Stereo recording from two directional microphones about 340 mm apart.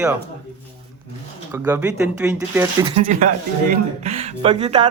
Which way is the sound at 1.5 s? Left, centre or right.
Centre.